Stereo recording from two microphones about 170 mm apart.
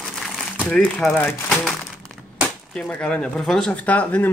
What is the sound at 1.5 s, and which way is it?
Crumpling, centre (ahead or behind).